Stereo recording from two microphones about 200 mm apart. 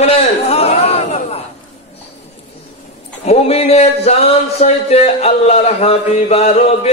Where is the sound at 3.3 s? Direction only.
30° left (ahead or behind).